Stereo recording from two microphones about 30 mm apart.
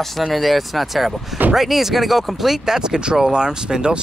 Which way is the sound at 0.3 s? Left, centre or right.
Centre.